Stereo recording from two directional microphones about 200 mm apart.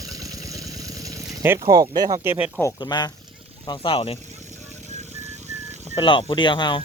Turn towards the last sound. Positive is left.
turn(degrees=25)  # may be behind; listen again after turning